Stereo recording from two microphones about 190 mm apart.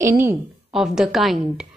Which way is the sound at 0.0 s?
10° right (ahead or behind).